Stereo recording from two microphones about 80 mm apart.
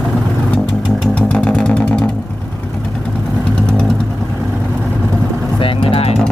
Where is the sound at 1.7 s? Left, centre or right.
Centre.